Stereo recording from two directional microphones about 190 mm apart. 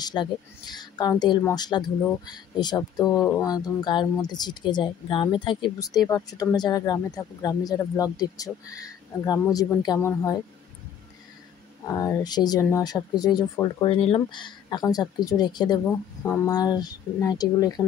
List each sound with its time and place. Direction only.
0.0 s speech: 20° left (ahead or behind)
11.8 s speech: 15° left (ahead or behind)
15.8 s speech: 10° left (ahead or behind)
16.5 s speech: 20° left (ahead or behind)